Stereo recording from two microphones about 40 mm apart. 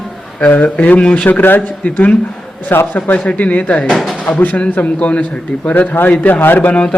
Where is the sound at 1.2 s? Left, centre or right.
Left.